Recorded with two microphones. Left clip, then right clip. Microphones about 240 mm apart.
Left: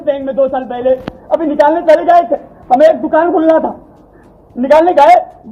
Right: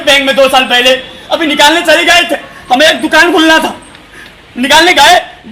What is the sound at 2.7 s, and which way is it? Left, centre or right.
Speech, right.